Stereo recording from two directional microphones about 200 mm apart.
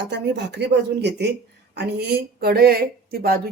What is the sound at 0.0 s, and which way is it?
Speech, 60° right (ahead or behind).